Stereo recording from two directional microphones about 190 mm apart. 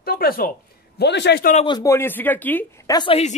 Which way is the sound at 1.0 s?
65° left (ahead or behind).